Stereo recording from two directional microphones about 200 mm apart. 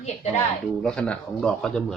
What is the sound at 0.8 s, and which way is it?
Speech, 5° left (ahead or behind).